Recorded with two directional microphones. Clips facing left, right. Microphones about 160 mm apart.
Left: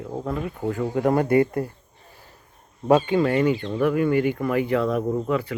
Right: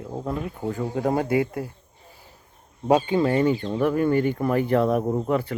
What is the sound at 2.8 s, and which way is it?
Speech, 25° right (ahead or behind).